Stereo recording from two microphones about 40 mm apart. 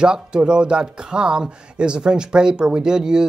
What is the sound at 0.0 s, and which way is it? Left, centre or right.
Speech, right.